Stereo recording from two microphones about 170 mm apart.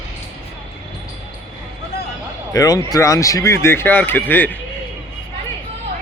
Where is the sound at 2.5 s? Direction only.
20° left (ahead or behind).